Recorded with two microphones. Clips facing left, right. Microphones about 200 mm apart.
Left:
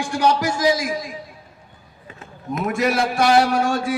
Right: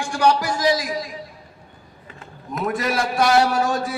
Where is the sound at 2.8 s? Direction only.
5° left (ahead or behind).